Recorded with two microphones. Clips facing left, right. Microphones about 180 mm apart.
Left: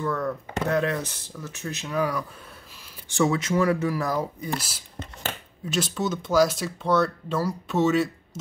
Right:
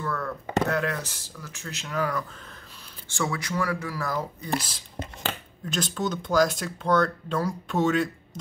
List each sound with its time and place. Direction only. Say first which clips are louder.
0.0 s speech: left 4 dB; 15° left (ahead or behind)